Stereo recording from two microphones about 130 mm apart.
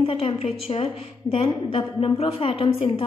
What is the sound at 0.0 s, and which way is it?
A woman's voice, 45° left (ahead or behind).